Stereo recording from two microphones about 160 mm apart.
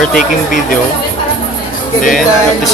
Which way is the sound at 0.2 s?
55° left (ahead or behind).